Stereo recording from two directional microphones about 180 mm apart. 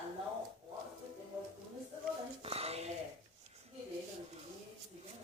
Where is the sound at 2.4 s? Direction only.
35° right (ahead or behind).